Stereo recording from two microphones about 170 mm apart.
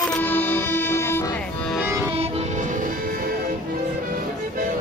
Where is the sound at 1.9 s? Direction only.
15° right (ahead or behind).